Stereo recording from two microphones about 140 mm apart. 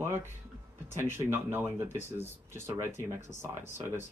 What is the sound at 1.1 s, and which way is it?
Speech, 15° right (ahead or behind).